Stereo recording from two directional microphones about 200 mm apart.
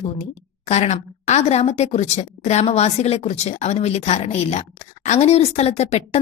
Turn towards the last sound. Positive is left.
turn(degrees=35)  # may be behind; listen again after turning